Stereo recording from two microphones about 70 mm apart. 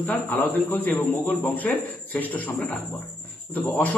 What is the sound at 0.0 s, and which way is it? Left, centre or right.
Speech, left.